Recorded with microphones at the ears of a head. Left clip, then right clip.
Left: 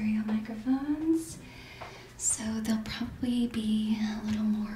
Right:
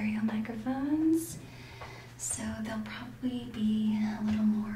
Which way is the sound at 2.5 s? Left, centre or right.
Left.